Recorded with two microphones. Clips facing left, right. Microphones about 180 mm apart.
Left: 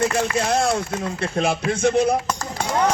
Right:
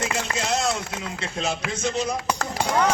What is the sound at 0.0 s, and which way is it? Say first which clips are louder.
A man's voice: left 7 dB; 55° left (ahead or behind).